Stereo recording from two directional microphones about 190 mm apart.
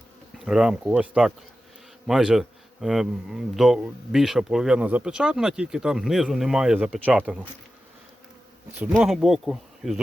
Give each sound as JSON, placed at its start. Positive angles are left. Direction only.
{"t": 0.3, "sound": "a man's voice", "side_deg": -5}
{"t": 8.7, "sound": "a man's voice", "side_deg": -5}